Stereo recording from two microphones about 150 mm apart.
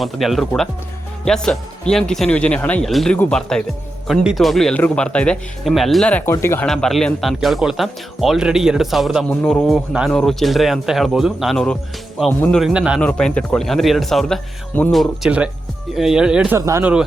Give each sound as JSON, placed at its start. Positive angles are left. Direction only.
{"t": 0.0, "sound": "speech", "side_deg": 0}
{"t": 6.7, "sound": "speech", "side_deg": 5}
{"t": 12.5, "sound": "a man's voice", "side_deg": -5}
{"t": 13.0, "sound": "speech", "side_deg": 5}
{"t": 14.9, "sound": "speech", "side_deg": -5}
{"t": 16.6, "sound": "speech", "side_deg": -20}